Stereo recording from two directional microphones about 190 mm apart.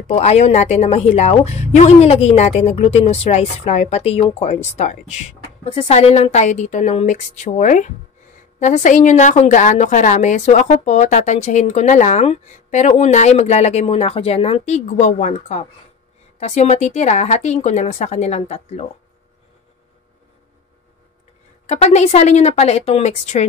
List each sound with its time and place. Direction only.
0.1 s a woman's voice: 35° left (ahead or behind)
21.6 s a woman's voice: 35° left (ahead or behind)